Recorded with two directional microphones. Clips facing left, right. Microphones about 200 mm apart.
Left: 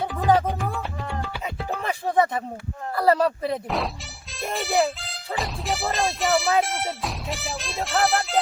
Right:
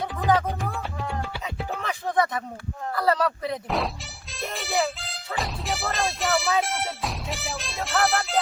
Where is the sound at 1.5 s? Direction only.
30° left (ahead or behind).